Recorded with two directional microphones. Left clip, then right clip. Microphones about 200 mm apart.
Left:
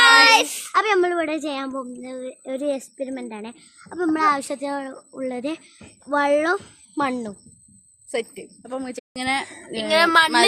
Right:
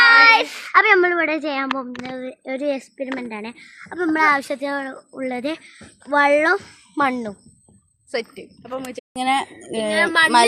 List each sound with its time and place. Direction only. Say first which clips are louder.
0.0 s a child's voice: right 2 dB; 5° left (ahead or behind)
8.1 s speech: right 1 dB; 20° left (ahead or behind)
9.1 s speech: right 4 dB; 10° right (ahead or behind)
9.9 s speech: left 2 dB; 60° left (ahead or behind)